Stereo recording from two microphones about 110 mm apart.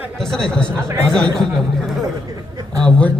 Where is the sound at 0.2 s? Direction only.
5° left (ahead or behind).